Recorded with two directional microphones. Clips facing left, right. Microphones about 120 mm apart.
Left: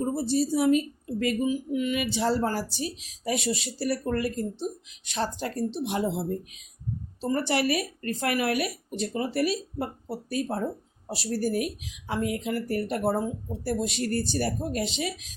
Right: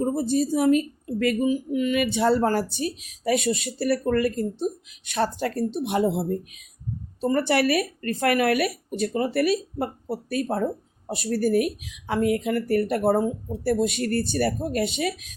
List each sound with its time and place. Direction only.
0.1 s a woman's voice: 50° right (ahead or behind)